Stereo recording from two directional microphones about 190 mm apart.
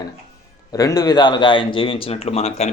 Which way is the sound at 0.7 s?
20° left (ahead or behind).